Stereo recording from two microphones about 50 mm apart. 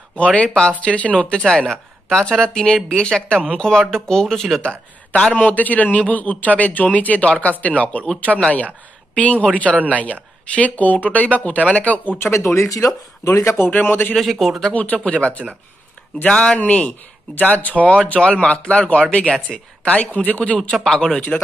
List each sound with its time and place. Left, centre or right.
0.1 s speech: left; by 4.6 s centre
4.6 s speech: left
5.4 s speech: left
9.2 s speech: left
12.2 s speech: left
13.7 s speech: left
14.1 s speech: centre
14.7 s speech: left
16.5 s speech: left
20.7 s speech: centre
21.1 s speech: left